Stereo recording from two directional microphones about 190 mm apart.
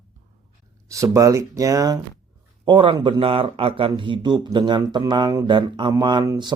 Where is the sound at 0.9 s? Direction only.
15° right (ahead or behind).